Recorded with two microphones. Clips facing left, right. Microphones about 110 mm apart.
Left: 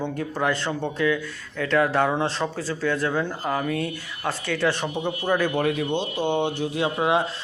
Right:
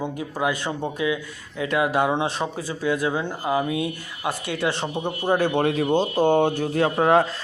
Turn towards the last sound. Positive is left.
turn(degrees=-45)  # may be behind; listen again after turning